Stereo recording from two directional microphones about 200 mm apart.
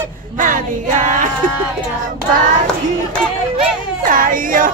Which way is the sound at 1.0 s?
40° right (ahead or behind).